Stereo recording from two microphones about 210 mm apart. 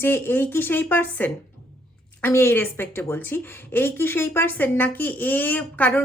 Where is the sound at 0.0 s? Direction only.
10° left (ahead or behind).